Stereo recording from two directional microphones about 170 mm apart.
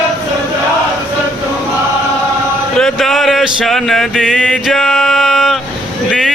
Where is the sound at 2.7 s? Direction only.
Centre (ahead or behind).